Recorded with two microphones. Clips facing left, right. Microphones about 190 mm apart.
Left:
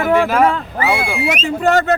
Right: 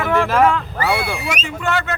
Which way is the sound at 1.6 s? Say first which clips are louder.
Left 9 dB; 35° left (ahead or behind).